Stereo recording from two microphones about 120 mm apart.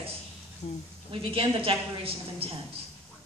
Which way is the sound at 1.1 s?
50° right (ahead or behind).